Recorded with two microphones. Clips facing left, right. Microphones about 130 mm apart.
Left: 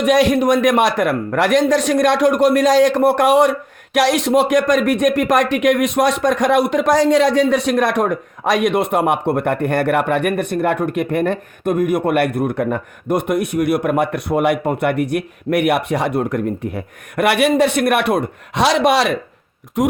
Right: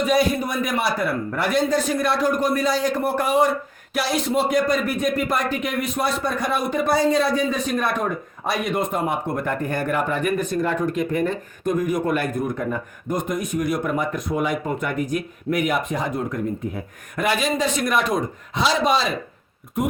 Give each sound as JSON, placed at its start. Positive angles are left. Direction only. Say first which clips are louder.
{"t": 0.0, "sound": "a man's voice", "louder": "left 6 dB", "side_deg": 90}
{"t": 19.8, "sound": "speech", "louder": "left 6 dB", "side_deg": 90}